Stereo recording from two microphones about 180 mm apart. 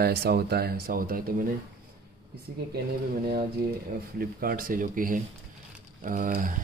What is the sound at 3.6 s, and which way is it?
Speech, 60° right (ahead or behind).